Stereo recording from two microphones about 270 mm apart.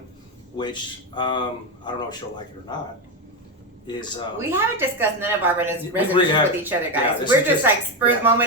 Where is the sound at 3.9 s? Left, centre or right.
Centre.